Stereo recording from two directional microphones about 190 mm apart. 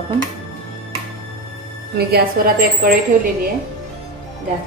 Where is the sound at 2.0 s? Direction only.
50° right (ahead or behind).